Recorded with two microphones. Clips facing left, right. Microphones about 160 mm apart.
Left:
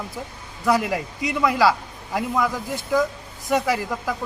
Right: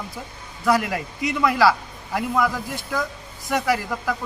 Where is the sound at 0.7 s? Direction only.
20° left (ahead or behind).